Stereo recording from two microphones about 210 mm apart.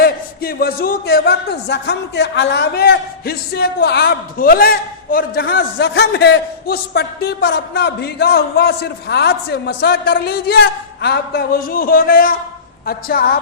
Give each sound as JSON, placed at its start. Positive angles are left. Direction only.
{"t": 0.0, "sound": "a man's voice", "side_deg": 45}